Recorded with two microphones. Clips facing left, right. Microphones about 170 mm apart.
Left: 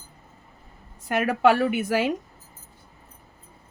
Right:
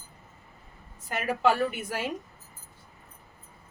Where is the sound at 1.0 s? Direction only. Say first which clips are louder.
Left 6 dB; 65° left (ahead or behind); by 2.1 s 85° left.